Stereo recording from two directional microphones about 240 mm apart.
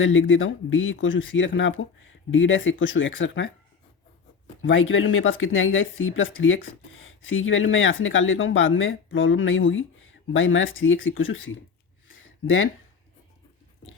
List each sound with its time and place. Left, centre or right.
0.0 s speech: left
4.6 s speech: left
12.0 s a sound: left